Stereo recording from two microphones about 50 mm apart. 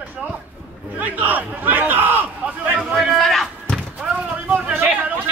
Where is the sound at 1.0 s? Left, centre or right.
Right.